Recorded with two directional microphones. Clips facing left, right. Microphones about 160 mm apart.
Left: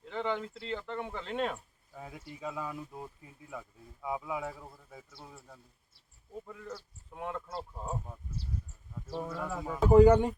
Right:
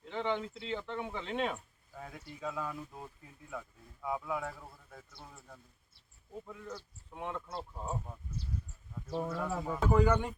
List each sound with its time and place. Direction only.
0.0 s speech: centre (ahead or behind)
9.2 s speech: 5° left (ahead or behind)
9.9 s a man's voice: 30° left (ahead or behind)